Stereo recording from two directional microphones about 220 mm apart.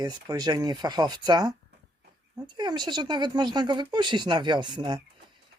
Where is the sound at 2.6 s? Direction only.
20° right (ahead or behind).